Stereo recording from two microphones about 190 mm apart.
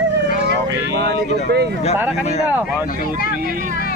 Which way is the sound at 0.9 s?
60° right (ahead or behind).